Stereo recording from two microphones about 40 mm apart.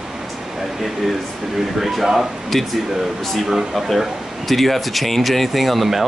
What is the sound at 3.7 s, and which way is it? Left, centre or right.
A man's voice, centre.